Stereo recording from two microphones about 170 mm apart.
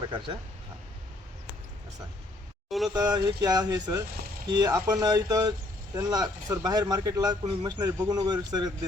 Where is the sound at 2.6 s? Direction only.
Centre (ahead or behind).